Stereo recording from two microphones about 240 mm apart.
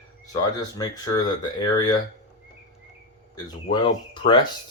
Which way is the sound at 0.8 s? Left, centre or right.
Centre.